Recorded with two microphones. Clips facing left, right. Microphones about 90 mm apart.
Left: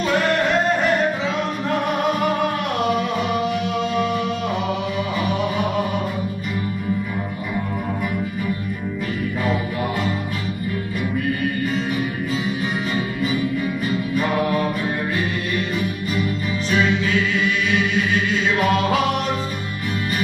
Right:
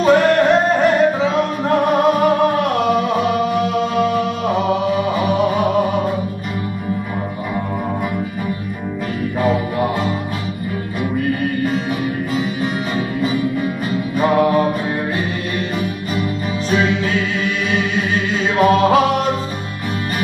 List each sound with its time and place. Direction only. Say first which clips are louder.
0.0 s music: right 7 dB; 40° right (ahead or behind)
9.4 s music: right 7 dB; 35° right (ahead or behind)
14.1 s music: right 8 dB; 35° right (ahead or behind)
16.7 s music: right 2 dB; 40° right (ahead or behind)
18.3 s chant: right 7 dB; 40° right (ahead or behind)